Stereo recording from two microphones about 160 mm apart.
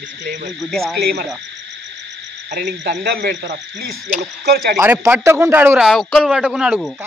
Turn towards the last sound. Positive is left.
turn(degrees=-5)  # may be behind; listen again after turning